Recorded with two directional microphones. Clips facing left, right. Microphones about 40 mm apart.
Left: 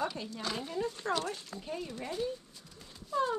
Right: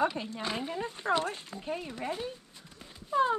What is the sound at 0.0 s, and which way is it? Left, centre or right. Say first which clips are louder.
Speech: right 5 dB; right.